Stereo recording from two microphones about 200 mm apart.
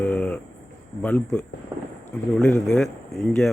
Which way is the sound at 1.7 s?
20° right (ahead or behind).